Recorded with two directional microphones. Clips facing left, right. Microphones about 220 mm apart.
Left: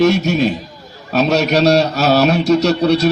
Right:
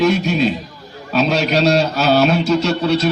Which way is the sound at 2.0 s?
40° left (ahead or behind).